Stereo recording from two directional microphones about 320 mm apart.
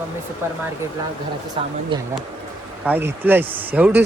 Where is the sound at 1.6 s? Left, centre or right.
Centre.